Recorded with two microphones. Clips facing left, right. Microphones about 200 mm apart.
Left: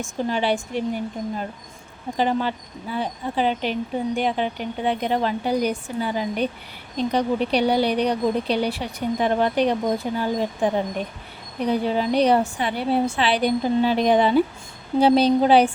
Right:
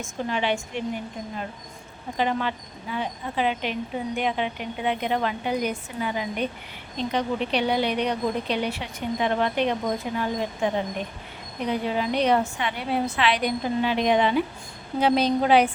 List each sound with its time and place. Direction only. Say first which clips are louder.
0.3 s speech: left 3 dB; 35° left (ahead or behind)
2.1 s speech: left 3 dB; 35° left (ahead or behind)